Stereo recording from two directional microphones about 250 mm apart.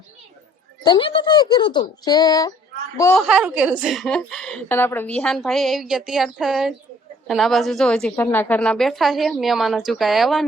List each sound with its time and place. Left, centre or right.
0.9 s speech: centre
3.2 s a woman's voice: centre